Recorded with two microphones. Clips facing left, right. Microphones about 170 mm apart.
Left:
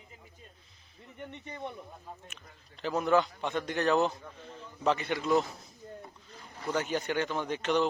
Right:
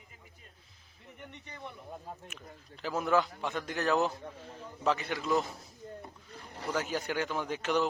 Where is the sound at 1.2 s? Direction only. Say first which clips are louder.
Left 6 dB; 35° left (ahead or behind).